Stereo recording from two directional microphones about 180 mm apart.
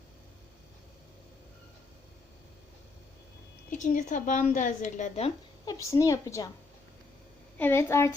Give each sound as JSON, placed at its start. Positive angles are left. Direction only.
{"t": 3.7, "sound": "a woman's voice", "side_deg": 45}
{"t": 5.6, "sound": "a woman's voice", "side_deg": 15}
{"t": 7.6, "sound": "a woman's voice", "side_deg": 15}